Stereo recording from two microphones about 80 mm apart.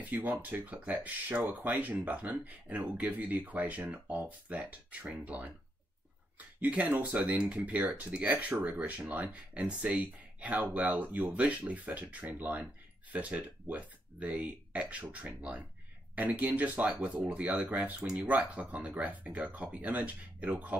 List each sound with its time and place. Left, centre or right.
0.0 s speech: right